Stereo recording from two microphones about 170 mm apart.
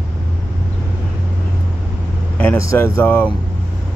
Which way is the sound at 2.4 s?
15° left (ahead or behind).